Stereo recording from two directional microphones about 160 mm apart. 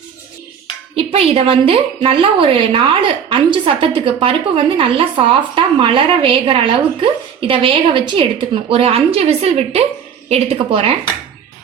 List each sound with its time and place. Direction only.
0.9 s a woman's voice: 40° right (ahead or behind)